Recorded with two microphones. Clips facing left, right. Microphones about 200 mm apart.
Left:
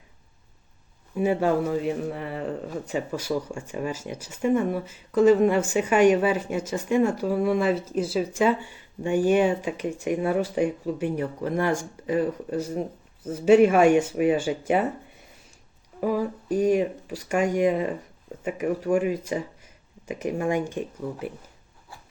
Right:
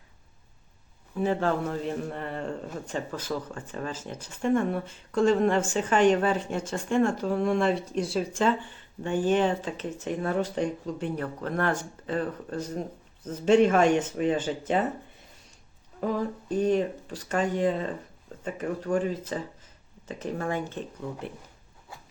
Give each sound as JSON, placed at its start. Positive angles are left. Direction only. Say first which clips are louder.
{"t": 1.1, "sound": "speech", "louder": "left 4 dB", "side_deg": 10}
{"t": 16.0, "sound": "speech", "louder": "left 3 dB", "side_deg": 10}